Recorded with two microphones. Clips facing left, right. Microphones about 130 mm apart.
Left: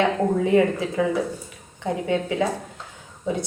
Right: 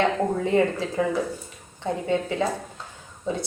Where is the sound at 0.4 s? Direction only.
20° left (ahead or behind).